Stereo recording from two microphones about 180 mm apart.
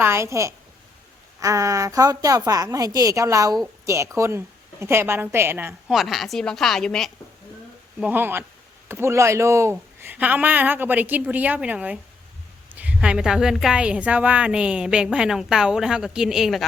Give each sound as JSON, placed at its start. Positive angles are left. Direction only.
{"t": 0.0, "sound": "a woman's voice", "side_deg": -15}
{"t": 5.9, "sound": "a woman's voice", "side_deg": 0}
{"t": 7.9, "sound": "a woman's voice", "side_deg": -10}